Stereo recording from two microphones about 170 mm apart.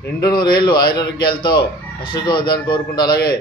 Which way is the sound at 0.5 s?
25° left (ahead or behind).